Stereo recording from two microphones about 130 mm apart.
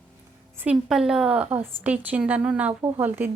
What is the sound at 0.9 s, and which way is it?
A woman's voice, 5° right (ahead or behind).